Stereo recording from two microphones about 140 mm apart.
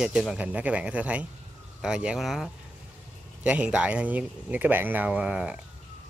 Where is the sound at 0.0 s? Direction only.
5° right (ahead or behind).